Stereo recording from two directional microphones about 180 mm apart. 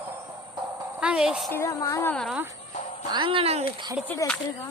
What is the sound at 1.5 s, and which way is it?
Speech, 15° left (ahead or behind).